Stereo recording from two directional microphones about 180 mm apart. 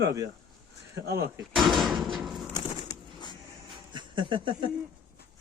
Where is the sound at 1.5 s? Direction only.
Centre (ahead or behind).